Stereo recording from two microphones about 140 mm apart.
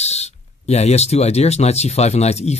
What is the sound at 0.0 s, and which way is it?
Speech, 50° left (ahead or behind).